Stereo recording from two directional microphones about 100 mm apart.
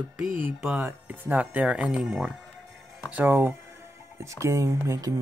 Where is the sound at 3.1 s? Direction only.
20° right (ahead or behind).